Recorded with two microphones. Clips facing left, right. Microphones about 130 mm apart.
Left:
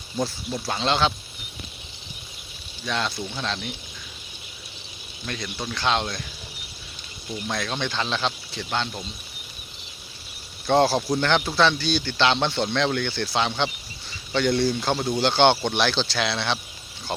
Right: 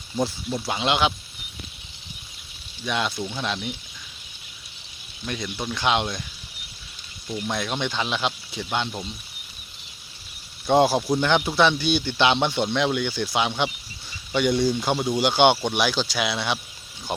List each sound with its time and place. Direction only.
0.6 s speech: 15° right (ahead or behind)
2.8 s speech: 15° right (ahead or behind)
5.2 s speech: 10° right (ahead or behind)
7.4 s speech: 10° right (ahead or behind)
10.7 s speech: 10° right (ahead or behind)